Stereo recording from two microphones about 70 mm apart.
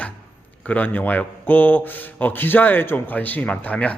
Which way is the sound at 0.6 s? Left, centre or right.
Left.